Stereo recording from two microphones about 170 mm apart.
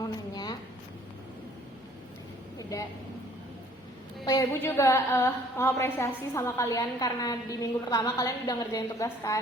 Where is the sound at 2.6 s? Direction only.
20° left (ahead or behind).